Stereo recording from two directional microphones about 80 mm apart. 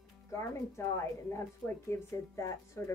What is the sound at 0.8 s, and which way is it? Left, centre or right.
Speech, left.